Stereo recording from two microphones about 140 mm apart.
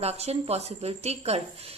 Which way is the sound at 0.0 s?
45° right (ahead or behind).